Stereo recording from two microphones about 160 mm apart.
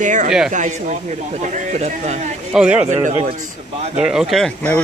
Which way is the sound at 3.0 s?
40° right (ahead or behind).